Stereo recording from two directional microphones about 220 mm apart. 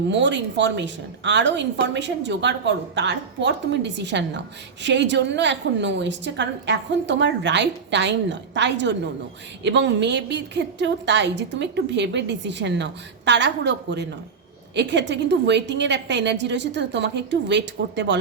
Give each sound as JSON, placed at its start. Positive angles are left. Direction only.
{"t": 0.1, "sound": "a woman's voice", "side_deg": -55}